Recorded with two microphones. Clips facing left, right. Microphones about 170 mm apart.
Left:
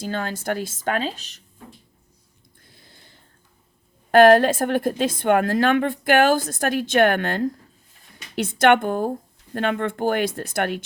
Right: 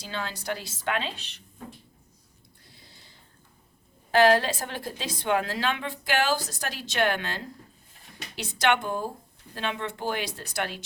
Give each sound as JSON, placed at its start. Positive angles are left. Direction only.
{"t": 0.0, "sound": "a woman's voice", "side_deg": 50}
{"t": 2.7, "sound": "a sound", "side_deg": 55}
{"t": 4.1, "sound": "a woman's voice", "side_deg": 55}